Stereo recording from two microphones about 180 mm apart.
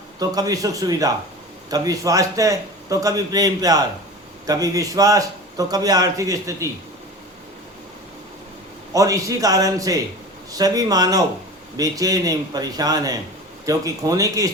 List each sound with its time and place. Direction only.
0.2 s a man's voice: 20° right (ahead or behind)
8.9 s a man's voice: 20° right (ahead or behind)